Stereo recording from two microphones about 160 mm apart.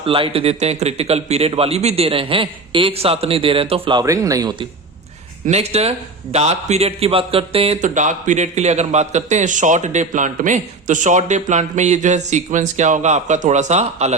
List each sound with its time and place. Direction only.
0.0 s a man's voice: 35° right (ahead or behind)
5.5 s a man's voice: 40° right (ahead or behind)
7.8 s a man's voice: 50° right (ahead or behind)